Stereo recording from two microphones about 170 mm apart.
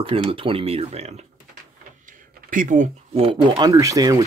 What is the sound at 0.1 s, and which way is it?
Speech, 35° right (ahead or behind).